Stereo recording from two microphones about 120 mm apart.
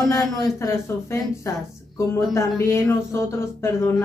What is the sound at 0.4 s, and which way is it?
A woman's voice, 25° left (ahead or behind).